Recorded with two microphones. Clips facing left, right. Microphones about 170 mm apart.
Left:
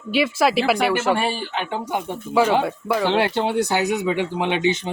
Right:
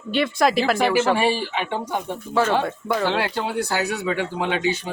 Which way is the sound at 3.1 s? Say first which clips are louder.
Left 4 dB; 20° left (ahead or behind).